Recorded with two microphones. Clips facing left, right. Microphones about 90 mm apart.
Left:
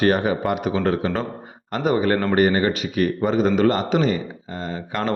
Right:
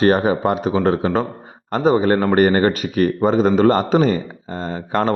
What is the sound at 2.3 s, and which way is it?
Speech, 45° right (ahead or behind).